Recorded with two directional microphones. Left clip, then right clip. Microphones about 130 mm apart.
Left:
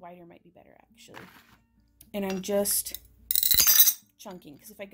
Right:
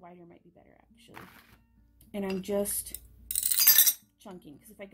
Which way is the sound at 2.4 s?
40° left (ahead or behind).